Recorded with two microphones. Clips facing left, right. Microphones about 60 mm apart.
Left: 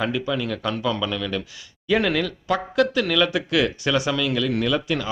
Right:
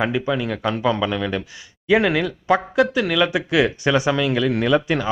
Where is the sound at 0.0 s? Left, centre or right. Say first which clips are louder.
Right 3 dB; right.